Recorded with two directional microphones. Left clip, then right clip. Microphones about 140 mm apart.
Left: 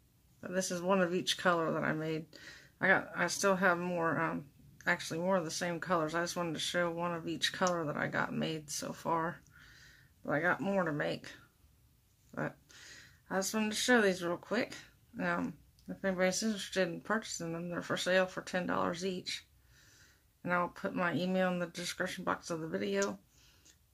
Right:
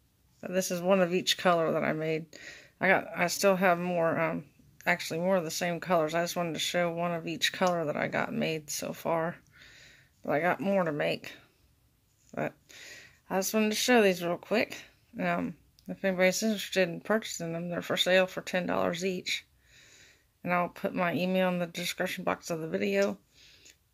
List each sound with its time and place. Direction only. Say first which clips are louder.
0.4 s speech: right 5 dB; 30° right (ahead or behind)
20.4 s speech: right 4 dB; 30° right (ahead or behind)